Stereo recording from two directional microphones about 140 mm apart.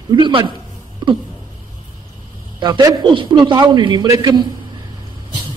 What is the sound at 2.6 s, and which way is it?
A man's voice, 30° right (ahead or behind).